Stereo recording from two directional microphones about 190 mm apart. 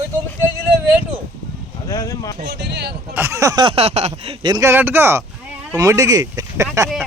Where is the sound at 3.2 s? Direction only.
15° right (ahead or behind).